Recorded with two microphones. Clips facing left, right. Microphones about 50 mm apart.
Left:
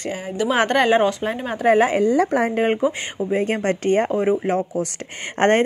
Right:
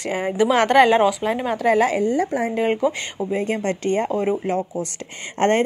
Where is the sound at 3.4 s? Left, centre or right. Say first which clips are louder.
Left 2 dB; left.